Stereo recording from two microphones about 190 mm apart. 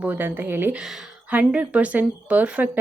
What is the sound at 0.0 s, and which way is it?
A woman's voice, 10° right (ahead or behind).